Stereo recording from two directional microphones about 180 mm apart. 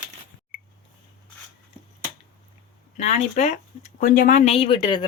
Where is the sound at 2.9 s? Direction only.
40° left (ahead or behind).